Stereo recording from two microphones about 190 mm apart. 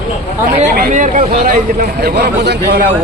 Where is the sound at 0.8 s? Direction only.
40° right (ahead or behind).